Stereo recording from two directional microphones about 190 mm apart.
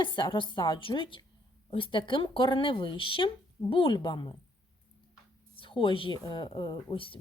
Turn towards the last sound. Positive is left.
turn(degrees=30)  # may be behind; listen again after turning